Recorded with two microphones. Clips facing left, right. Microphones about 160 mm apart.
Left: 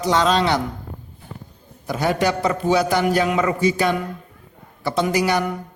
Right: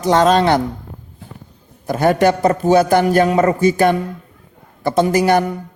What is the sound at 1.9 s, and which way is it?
A woman's voice, 50° right (ahead or behind).